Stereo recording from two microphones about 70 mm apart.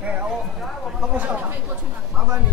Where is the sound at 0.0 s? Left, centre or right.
Right.